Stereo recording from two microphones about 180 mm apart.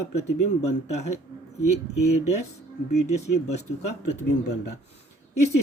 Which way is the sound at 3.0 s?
40° left (ahead or behind).